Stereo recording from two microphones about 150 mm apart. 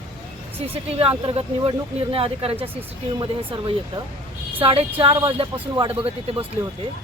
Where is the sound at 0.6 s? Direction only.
40° right (ahead or behind).